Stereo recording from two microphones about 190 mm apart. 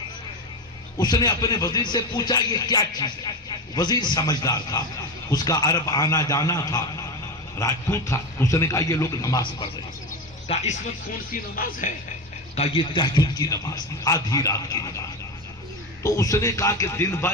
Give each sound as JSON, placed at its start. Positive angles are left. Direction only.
{"t": 0.9, "sound": "a man's voice", "side_deg": 20}
{"t": 11.3, "sound": "speech", "side_deg": 50}
{"t": 12.5, "sound": "a man's voice", "side_deg": 30}
{"t": 16.0, "sound": "a man's voice", "side_deg": 15}